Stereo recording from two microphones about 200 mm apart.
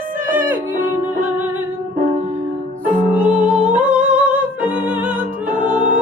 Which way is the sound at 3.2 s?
5° right (ahead or behind).